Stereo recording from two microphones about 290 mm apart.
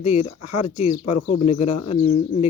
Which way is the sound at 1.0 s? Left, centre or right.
Left.